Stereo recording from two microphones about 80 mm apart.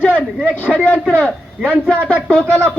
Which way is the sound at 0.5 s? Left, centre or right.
Centre.